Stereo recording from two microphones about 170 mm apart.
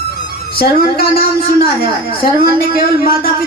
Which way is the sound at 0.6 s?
60° left (ahead or behind).